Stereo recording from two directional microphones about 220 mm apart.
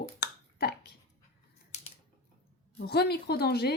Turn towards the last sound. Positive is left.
turn(degrees=45)  # may be behind; listen again after turning